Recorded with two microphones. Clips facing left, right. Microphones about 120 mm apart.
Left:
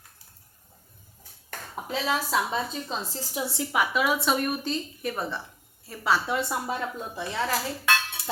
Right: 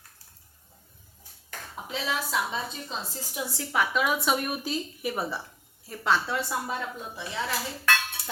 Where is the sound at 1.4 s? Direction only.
45° left (ahead or behind).